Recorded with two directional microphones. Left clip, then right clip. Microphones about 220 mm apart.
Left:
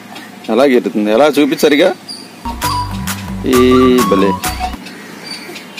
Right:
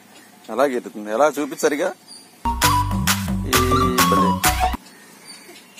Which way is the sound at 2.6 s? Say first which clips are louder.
Left 1 dB; centre (ahead or behind).